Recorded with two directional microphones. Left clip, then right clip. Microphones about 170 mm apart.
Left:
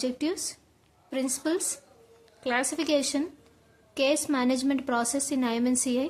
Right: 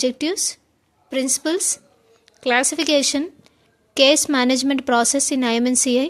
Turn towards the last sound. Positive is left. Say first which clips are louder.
# right 9 dB
turn(degrees=-35)  # may be behind; listen again after turning